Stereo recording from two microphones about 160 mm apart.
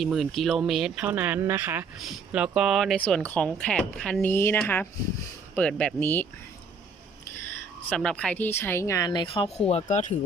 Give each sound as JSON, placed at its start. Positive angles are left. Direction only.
{"t": 0.0, "sound": "a woman's voice", "side_deg": 0}
{"t": 7.3, "sound": "a woman's voice", "side_deg": 10}